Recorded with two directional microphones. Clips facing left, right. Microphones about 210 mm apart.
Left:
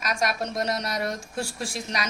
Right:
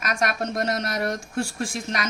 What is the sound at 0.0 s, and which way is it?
Speech, 55° right (ahead or behind).